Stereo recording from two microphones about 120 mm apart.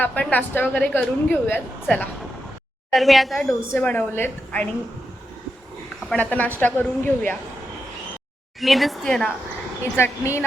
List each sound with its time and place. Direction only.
0.0 s a woman's voice: 15° left (ahead or behind)
2.9 s speech: centre (ahead or behind)
3.7 s a woman's voice: 15° left (ahead or behind)
6.1 s a woman's voice: 15° left (ahead or behind)
8.6 s speech: centre (ahead or behind)
9.9 s speech: 20° left (ahead or behind)